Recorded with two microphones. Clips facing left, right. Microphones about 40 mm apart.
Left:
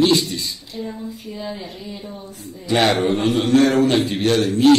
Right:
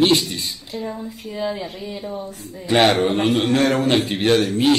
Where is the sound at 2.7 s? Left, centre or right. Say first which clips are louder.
Right 1 dB; centre.